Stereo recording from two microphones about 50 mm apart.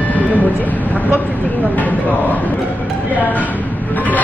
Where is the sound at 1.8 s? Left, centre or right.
Left.